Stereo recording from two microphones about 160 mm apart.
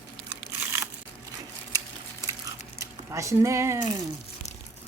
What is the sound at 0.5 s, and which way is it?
Crumpling, 15° right (ahead or behind).